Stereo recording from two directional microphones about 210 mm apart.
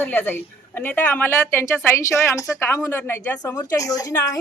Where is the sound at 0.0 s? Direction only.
10° left (ahead or behind).